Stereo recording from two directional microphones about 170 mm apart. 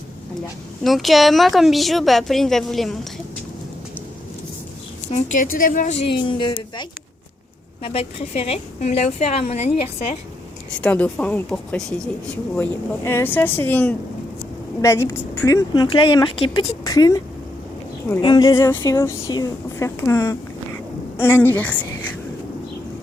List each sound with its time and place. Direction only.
0.9 s a woman's voice: centre (ahead or behind)
5.1 s a woman's voice: 55° left (ahead or behind)
6.1 s a woman's voice: 30° left (ahead or behind)
10.8 s speech: 5° left (ahead or behind)
13.1 s speech: 15° left (ahead or behind)
15.9 s speech: 30° left (ahead or behind); by 21.8 s 10° left (ahead or behind)